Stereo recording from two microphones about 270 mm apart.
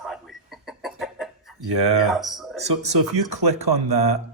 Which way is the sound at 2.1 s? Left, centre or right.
Centre.